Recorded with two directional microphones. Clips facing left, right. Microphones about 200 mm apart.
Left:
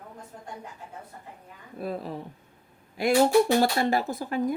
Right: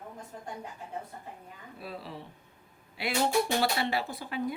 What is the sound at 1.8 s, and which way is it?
Speech, 50° left (ahead or behind).